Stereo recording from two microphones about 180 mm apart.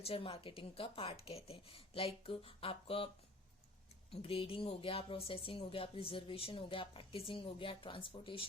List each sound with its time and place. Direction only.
0.0 s speech: 30° left (ahead or behind)
4.1 s speech: 30° left (ahead or behind)